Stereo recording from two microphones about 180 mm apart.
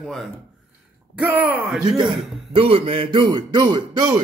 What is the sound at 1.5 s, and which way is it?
Speech, 5° right (ahead or behind).